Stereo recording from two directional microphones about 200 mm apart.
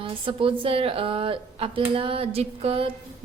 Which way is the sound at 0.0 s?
25° right (ahead or behind).